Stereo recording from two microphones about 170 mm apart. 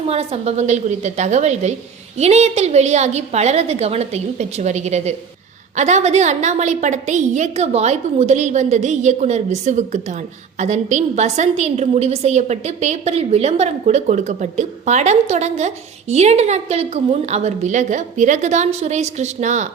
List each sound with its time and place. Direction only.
0.1 s a woman's voice: 35° right (ahead or behind)